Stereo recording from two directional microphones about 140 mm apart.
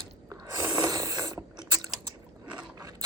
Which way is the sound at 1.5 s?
25° right (ahead or behind).